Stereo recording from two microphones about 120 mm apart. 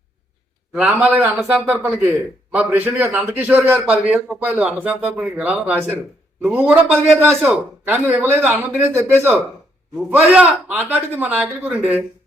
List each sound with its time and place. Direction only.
0.7 s speech: 10° right (ahead or behind)